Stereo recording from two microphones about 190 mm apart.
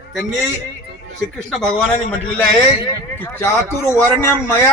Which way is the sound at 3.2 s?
10° left (ahead or behind).